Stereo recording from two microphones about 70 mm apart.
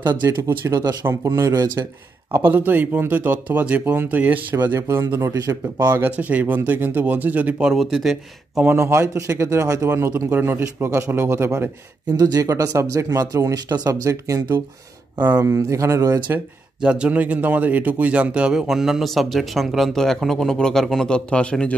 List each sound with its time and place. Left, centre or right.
0.0 s speech: right
1.2 s speech: right
2.3 s speech: right
4.7 s speech: right
5.3 s speech: right
5.9 s speech: right
7.6 s speech: centre
8.7 s speech: right
12.2 s speech: right
13.7 s speech: right
14.0 s speech: right
16.8 s speech: centre